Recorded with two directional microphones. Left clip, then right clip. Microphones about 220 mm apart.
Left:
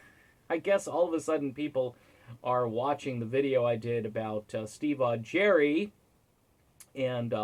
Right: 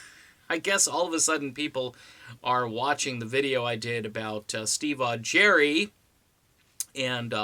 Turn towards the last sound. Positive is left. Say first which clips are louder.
# right 2 dB
turn(degrees=-20)  # may be behind; listen again after turning